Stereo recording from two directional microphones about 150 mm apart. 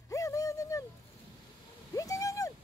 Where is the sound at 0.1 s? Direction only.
20° left (ahead or behind).